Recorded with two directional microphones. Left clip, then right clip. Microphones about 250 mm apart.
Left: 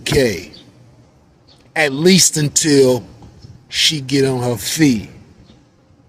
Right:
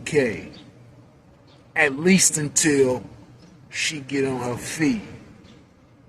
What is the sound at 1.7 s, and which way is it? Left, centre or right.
A man's voice, left.